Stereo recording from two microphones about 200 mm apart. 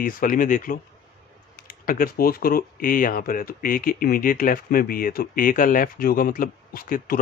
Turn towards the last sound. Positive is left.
turn(degrees=45)  # may be behind; listen again after turning